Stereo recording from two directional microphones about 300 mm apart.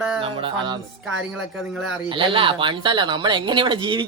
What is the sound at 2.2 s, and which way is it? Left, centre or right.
Speech, centre.